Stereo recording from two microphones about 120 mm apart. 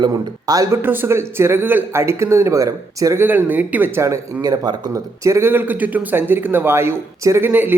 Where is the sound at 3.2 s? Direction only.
15° right (ahead or behind).